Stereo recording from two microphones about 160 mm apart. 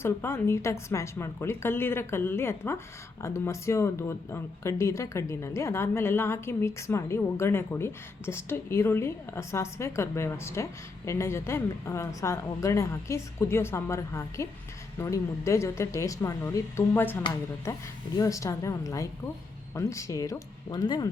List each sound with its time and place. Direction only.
0.0 s a woman's voice: 15° left (ahead or behind)